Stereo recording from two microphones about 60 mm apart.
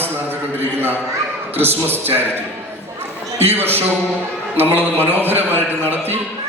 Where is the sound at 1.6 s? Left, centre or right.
Right.